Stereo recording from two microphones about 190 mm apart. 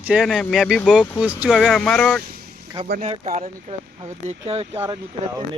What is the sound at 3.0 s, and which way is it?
Speech, 40° right (ahead or behind).